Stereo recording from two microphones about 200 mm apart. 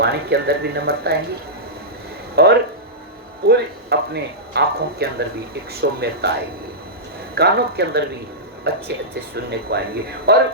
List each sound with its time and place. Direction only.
0.0 s speech: 55° right (ahead or behind)
2.3 s speech: 55° right (ahead or behind)
7.3 s speech: 55° right (ahead or behind)